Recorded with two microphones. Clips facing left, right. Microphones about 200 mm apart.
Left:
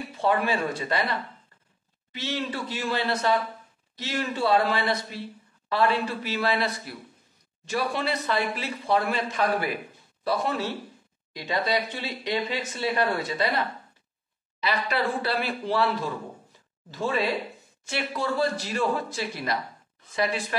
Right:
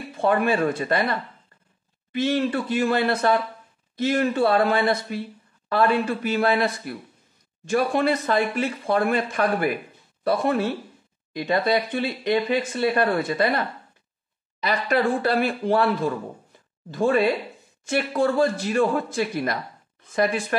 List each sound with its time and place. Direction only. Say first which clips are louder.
0.2 s speech: right 4 dB; 50° right (ahead or behind)
2.1 s speech: right 9 dB; 55° right (ahead or behind)